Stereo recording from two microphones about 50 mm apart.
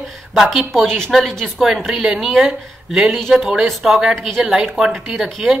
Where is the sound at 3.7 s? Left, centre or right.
Centre.